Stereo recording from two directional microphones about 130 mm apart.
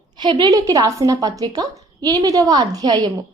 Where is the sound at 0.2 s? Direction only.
35° right (ahead or behind).